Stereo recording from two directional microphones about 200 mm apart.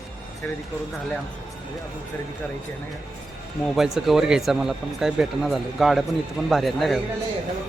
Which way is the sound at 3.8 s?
Centre (ahead or behind).